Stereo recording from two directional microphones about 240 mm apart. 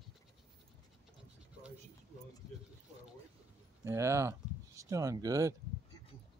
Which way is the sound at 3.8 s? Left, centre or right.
Centre.